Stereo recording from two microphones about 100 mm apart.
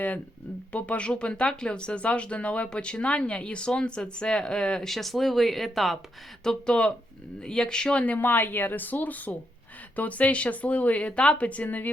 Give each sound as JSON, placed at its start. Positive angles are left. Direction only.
{"t": 0.7, "sound": "speech", "side_deg": 15}